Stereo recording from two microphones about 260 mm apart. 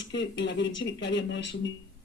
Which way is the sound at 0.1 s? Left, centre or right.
Left.